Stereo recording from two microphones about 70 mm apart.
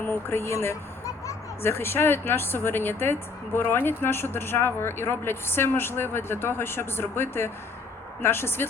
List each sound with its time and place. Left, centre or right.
0.0 s speech: left
1.6 s speech: left